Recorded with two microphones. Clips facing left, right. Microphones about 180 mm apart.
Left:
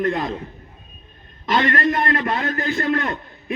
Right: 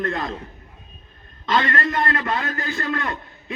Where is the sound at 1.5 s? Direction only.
25° left (ahead or behind).